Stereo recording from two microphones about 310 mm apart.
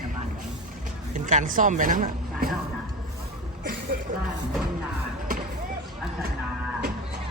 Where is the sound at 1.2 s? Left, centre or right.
Right.